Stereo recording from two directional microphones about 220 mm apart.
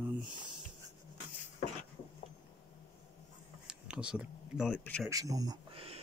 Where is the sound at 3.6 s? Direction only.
5° right (ahead or behind).